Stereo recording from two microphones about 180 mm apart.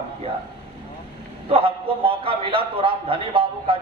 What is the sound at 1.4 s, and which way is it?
A man's voice, 30° right (ahead or behind).